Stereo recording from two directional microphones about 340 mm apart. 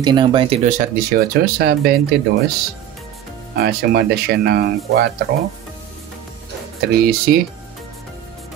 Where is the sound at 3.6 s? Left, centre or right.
Right.